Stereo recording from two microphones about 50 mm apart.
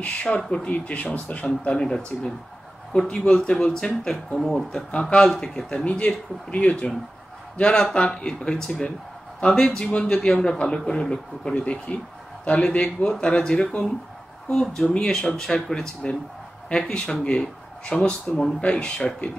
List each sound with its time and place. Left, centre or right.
0.0 s speech: left; by 4.8 s centre
5.1 s speech: centre
15.0 s speech: centre